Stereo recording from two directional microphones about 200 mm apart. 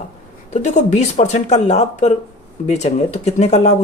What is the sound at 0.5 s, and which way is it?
Speech, 35° left (ahead or behind).